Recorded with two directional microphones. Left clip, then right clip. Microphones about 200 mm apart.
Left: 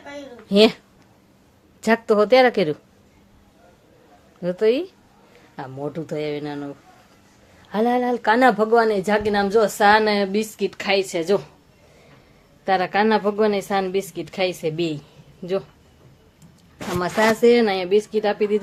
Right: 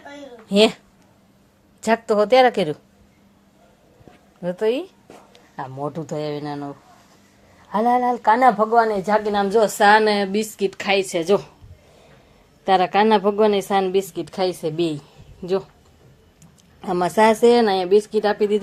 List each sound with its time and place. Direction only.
0.4 s speech: 10° left (ahead or behind)
1.8 s a woman's voice: 10° left (ahead or behind)
4.4 s a woman's voice: 10° left (ahead or behind)
9.2 s speech: 5° left (ahead or behind)
9.6 s a woman's voice: 10° right (ahead or behind)
12.6 s a woman's voice: 10° right (ahead or behind)
17.0 s speech: 25° right (ahead or behind)
17.4 s a woman's voice: 10° right (ahead or behind)